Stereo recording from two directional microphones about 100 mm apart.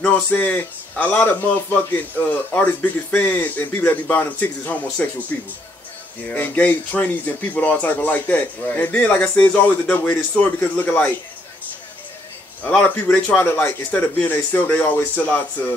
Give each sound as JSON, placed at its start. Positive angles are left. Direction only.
{"t": 0.0, "sound": "a man's voice", "side_deg": 15}
{"t": 12.6, "sound": "a man's voice", "side_deg": 15}